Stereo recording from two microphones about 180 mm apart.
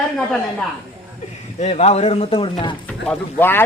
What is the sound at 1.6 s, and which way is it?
Speech, 40° left (ahead or behind).